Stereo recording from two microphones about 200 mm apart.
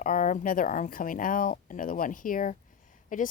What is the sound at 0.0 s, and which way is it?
Speech, 45° left (ahead or behind).